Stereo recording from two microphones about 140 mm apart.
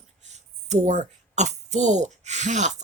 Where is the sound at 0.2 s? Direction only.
55° right (ahead or behind).